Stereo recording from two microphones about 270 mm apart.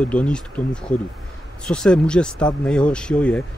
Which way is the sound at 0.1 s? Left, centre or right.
Centre.